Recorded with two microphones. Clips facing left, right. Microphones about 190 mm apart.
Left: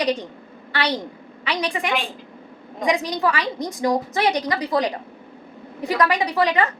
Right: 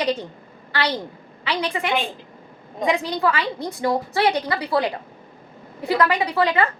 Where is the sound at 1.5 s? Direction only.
15° left (ahead or behind).